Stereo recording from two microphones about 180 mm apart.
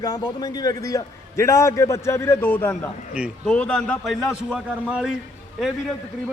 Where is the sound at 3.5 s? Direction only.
5° left (ahead or behind).